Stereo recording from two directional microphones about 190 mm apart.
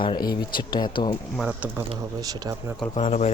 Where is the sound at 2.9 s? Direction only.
35° left (ahead or behind).